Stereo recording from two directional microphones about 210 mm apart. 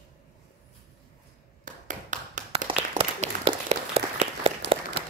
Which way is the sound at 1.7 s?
35° right (ahead or behind).